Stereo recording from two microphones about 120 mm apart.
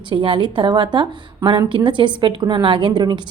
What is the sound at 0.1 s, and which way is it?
A woman's voice, 45° right (ahead or behind).